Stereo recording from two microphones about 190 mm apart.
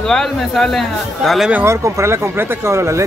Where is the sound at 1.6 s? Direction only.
15° right (ahead or behind).